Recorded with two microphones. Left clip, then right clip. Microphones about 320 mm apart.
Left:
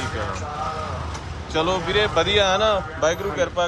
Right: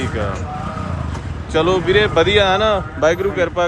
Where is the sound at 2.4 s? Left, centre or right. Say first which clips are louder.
Right 4 dB; centre.